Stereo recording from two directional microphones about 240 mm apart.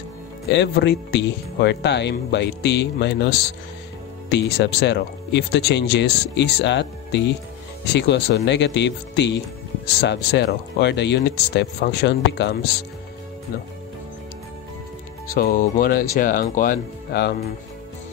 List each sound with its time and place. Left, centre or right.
0.5 s speech: left
15.3 s speech: left